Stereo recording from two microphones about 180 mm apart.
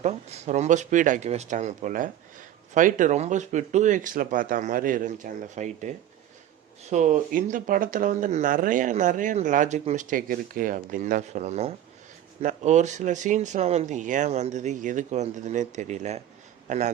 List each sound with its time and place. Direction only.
0.0 s speech: 40° right (ahead or behind)
6.9 s speech: 40° right (ahead or behind)